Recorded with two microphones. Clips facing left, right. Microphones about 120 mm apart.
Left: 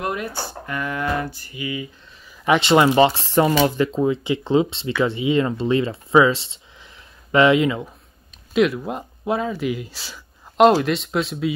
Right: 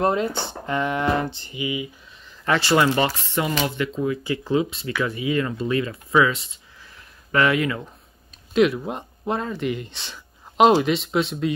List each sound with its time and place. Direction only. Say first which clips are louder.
0.0 s speech: right 5 dB; 25° right (ahead or behind)
2.4 s speech: left 4 dB; 20° left (ahead or behind)
8.5 s speech: even; centre (ahead or behind)